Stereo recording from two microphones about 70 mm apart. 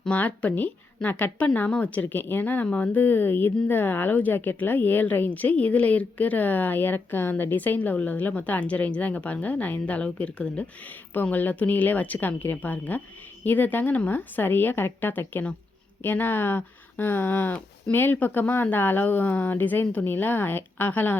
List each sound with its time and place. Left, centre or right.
0.0 s speech: centre